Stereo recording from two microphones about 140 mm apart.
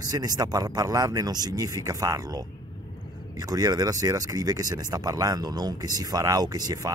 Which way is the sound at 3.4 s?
25° right (ahead or behind).